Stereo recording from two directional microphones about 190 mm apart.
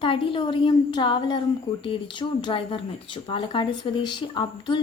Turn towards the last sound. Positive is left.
turn(degrees=25)  # may be behind; listen again after turning